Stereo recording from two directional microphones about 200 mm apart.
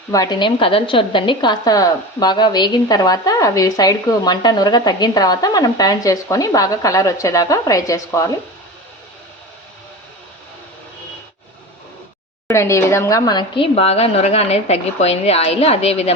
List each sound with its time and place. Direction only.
0.1 s a woman's voice: 20° left (ahead or behind)
12.5 s speech: 15° left (ahead or behind); by 16.1 s 30° left (ahead or behind)